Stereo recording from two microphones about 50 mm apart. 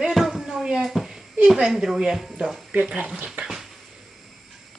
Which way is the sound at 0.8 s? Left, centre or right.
Centre.